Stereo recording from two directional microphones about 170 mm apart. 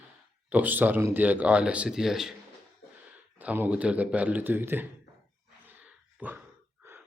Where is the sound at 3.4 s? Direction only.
10° right (ahead or behind).